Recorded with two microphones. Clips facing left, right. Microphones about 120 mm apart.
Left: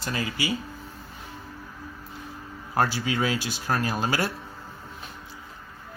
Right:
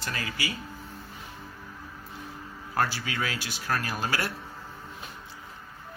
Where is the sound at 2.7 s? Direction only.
20° left (ahead or behind).